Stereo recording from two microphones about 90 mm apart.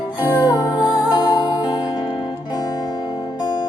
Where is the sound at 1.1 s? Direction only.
60° left (ahead or behind).